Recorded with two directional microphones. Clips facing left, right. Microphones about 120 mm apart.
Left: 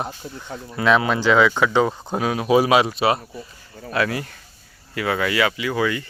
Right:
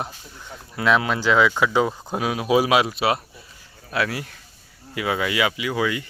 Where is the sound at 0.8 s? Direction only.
Centre (ahead or behind).